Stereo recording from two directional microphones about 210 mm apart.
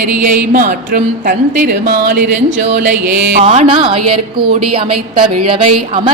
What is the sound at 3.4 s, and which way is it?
A woman's voice, 30° right (ahead or behind).